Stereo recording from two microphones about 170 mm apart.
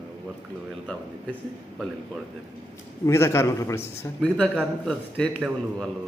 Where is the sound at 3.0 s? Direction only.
15° left (ahead or behind).